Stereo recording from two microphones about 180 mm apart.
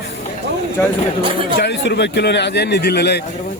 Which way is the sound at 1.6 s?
65° left (ahead or behind).